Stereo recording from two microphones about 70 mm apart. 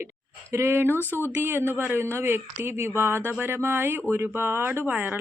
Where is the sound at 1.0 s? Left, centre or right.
Left.